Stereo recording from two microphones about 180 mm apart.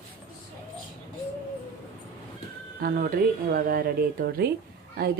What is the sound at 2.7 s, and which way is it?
Speech, 55° right (ahead or behind).